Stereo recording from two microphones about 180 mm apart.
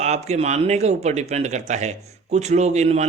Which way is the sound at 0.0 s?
40° right (ahead or behind).